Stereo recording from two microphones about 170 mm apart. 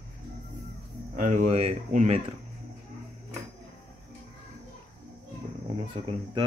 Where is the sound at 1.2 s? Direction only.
45° right (ahead or behind).